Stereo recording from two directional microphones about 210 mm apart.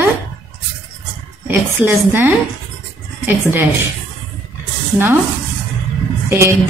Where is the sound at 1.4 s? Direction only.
10° right (ahead or behind).